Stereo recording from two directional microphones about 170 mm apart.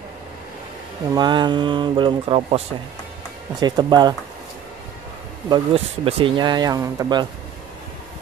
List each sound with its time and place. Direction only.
1.1 s speech: 25° right (ahead or behind)
5.5 s speech: 35° right (ahead or behind)